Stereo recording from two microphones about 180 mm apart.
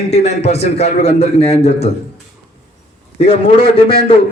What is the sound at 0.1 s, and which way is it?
A man's voice, 35° left (ahead or behind).